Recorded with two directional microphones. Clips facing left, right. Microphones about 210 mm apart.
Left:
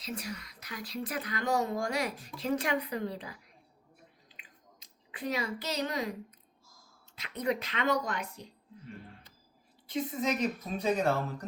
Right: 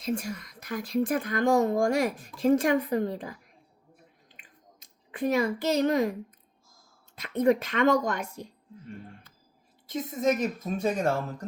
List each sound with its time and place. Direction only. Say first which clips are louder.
0.0 s speech: right 8 dB; 50° right (ahead or behind)
4.4 s chewing: right 3 dB; 50° right (ahead or behind)
7.2 s speech: right 9 dB; 50° right (ahead or behind)
9.9 s speech: right 5 dB; 45° right (ahead or behind)